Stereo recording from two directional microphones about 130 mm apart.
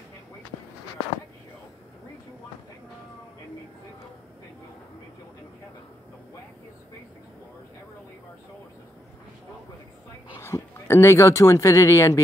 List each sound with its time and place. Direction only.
10.4 s speech: 20° left (ahead or behind)